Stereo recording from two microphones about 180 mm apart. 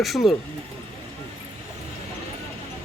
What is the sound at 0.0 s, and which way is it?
Speech, centre (ahead or behind).